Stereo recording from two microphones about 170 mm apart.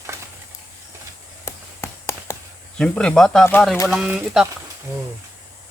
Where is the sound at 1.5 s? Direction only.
15° left (ahead or behind).